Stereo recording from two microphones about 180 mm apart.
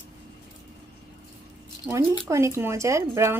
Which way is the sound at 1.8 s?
15° right (ahead or behind).